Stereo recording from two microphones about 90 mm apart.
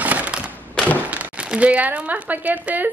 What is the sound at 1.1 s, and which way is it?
Speech, 15° right (ahead or behind).